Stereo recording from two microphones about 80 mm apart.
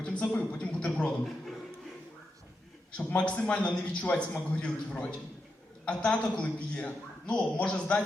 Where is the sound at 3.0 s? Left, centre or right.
Centre.